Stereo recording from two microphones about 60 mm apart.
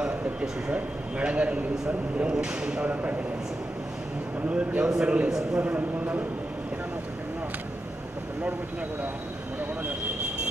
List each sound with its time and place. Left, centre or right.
0.0 s a man's voice: centre
2.9 s a man's voice: right
4.5 s a man's voice: centre